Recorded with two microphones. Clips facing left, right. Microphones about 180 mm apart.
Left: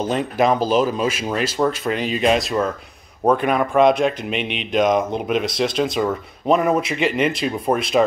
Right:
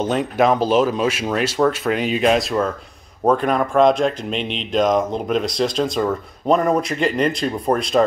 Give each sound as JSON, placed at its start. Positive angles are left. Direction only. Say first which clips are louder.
{"t": 0.0, "sound": "speech", "louder": "right 1 dB", "side_deg": 0}